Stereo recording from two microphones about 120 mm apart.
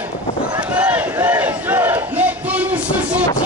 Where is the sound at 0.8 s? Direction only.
15° right (ahead or behind).